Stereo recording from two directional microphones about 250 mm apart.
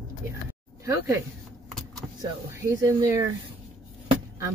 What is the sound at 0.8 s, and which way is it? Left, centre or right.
Speech, centre.